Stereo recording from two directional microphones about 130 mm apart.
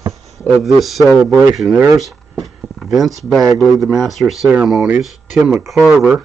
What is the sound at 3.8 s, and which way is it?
Speech, centre (ahead or behind).